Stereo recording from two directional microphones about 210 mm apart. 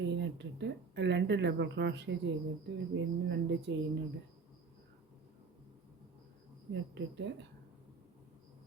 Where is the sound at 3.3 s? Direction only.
55° right (ahead or behind).